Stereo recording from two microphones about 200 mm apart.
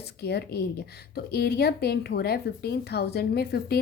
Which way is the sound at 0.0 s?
55° left (ahead or behind).